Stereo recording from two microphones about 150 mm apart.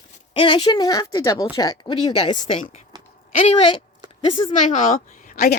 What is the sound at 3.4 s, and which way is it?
A woman's voice, 45° left (ahead or behind).